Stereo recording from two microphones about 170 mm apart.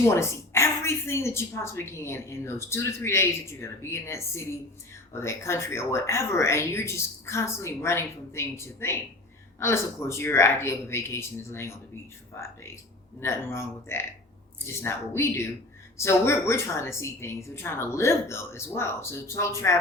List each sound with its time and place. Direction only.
0.1 s a woman's voice: 15° left (ahead or behind)
13.1 s a woman's voice: 15° left (ahead or behind)